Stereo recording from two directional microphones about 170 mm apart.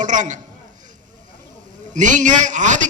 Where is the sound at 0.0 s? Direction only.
45° right (ahead or behind).